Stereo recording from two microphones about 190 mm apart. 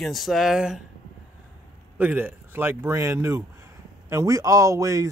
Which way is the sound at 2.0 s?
10° right (ahead or behind).